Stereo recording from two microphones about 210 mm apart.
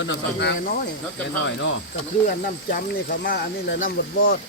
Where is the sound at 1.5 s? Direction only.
60° left (ahead or behind).